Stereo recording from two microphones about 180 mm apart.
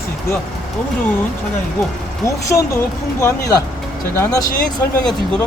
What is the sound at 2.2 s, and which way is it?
Speech, 15° left (ahead or behind).